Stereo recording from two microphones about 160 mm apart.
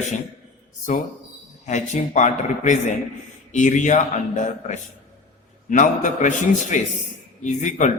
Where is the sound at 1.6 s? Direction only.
50° left (ahead or behind).